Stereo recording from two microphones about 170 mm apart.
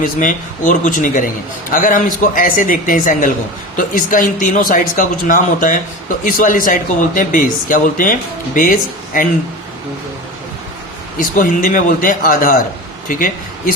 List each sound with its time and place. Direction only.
0.0 s speech: 50° left (ahead or behind)
11.2 s speech: 50° left (ahead or behind)